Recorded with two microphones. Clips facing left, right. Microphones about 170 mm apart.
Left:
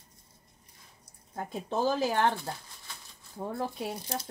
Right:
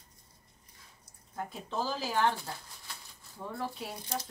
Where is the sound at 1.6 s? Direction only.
50° left (ahead or behind).